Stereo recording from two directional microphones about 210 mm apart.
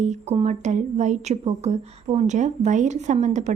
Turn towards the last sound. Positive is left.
turn(degrees=-35)  # may be behind; listen again after turning